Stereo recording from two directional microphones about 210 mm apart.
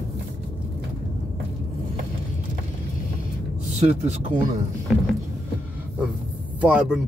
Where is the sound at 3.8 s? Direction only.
35° right (ahead or behind).